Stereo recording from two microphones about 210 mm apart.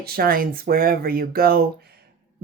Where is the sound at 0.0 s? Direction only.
45° right (ahead or behind).